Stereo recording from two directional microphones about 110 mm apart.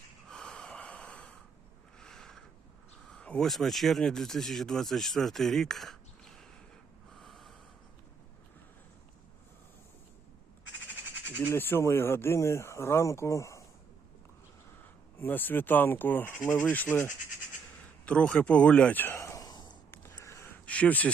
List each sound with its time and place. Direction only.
0.3 s snort: 5° left (ahead or behind)
2.0 s a sound: 5° left (ahead or behind)
3.1 s speech: 10° left (ahead or behind)
7.1 s snort: centre (ahead or behind)
11.4 s speech: 20° left (ahead or behind)
15.2 s speech: 15° left (ahead or behind); by 19.7 s 35° left (ahead or behind)
19.9 s a sound: 20° left (ahead or behind)
20.7 s speech: 15° left (ahead or behind)